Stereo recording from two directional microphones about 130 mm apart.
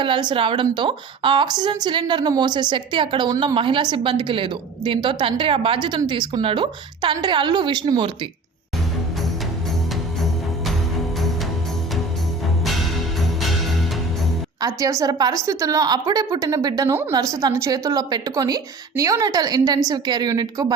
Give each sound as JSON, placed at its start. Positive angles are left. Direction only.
{"t": 0.0, "sound": "a woman's voice", "side_deg": -35}
{"t": 12.6, "sound": "music", "side_deg": 0}
{"t": 14.6, "sound": "a woman's voice", "side_deg": -25}